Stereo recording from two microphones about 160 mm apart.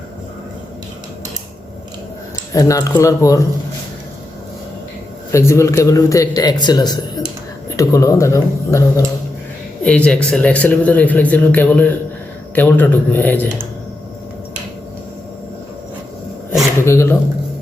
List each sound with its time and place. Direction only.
2.5 s a man's voice: 20° left (ahead or behind)
5.3 s a man's voice: 15° left (ahead or behind)
9.8 s speech: 5° left (ahead or behind)
16.8 s speech: 15° left (ahead or behind)